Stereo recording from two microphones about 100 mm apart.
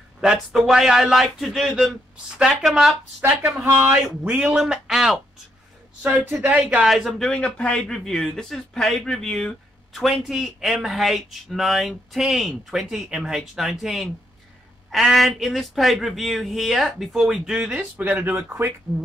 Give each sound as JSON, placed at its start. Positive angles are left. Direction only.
{"t": 0.2, "sound": "speech", "side_deg": -5}
{"t": 3.2, "sound": "a man's voice", "side_deg": -20}
{"t": 6.4, "sound": "speech", "side_deg": -15}
{"t": 18.0, "sound": "a man's voice", "side_deg": -15}